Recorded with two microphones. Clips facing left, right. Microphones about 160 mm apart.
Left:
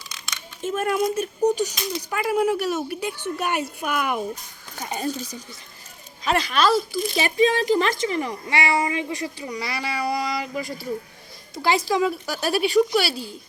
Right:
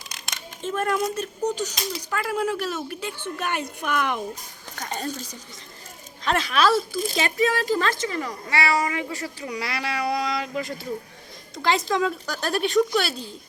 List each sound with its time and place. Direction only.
0.7 s a woman's voice: 15° left (ahead or behind)
6.2 s speech: centre (ahead or behind)
7.2 s speech: 15° left (ahead or behind)
9.5 s speech: centre (ahead or behind)
11.9 s a woman's voice: 5° left (ahead or behind)